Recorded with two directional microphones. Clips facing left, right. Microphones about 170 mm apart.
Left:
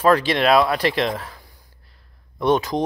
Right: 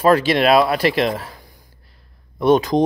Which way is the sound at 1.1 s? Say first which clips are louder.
Right 2 dB; 30° right (ahead or behind).